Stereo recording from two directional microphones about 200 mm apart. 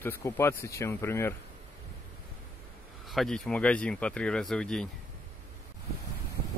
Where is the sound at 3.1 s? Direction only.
5° left (ahead or behind).